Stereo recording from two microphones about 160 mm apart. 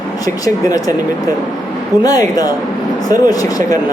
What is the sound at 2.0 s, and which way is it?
A woman's voice, 20° left (ahead or behind).